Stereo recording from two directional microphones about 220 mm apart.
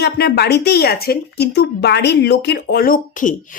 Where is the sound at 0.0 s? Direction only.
45° left (ahead or behind).